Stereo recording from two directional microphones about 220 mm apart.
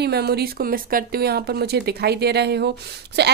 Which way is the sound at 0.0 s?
45° right (ahead or behind).